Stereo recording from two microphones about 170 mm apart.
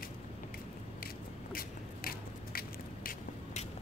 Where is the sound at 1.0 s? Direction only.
60° left (ahead or behind).